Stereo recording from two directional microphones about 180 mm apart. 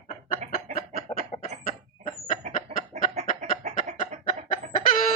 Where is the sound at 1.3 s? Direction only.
35° left (ahead or behind).